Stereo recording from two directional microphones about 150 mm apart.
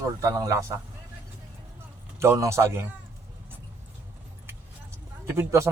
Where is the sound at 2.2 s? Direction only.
20° right (ahead or behind).